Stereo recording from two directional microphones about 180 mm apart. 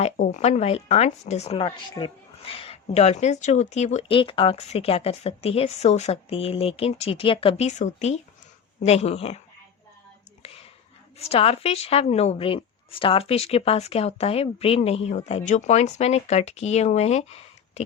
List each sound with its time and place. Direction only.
0.0 s speech: 40° left (ahead or behind)
10.4 s whispering: 35° left (ahead or behind)
11.2 s speech: 35° left (ahead or behind)